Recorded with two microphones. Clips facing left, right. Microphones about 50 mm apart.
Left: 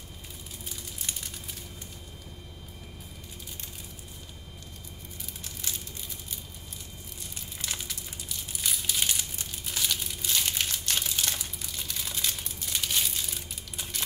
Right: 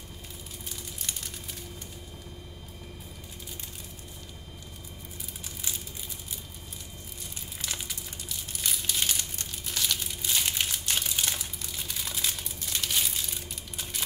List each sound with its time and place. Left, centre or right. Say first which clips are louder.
0.7 s a sound: even; centre
5.4 s crushing: even; centre
7.6 s crumpling: even; centre